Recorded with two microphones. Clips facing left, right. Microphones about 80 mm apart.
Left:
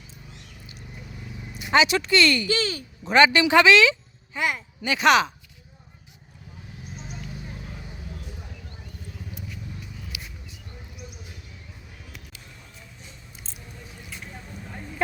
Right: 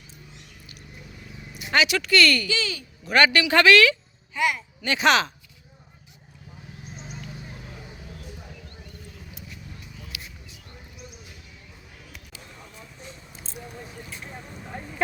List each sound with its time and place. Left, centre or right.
1.7 s speech: left
2.5 s speech: left
3.1 s a woman's voice: centre
4.4 s a child's voice: left
4.9 s speech: centre
10.1 s a sound: centre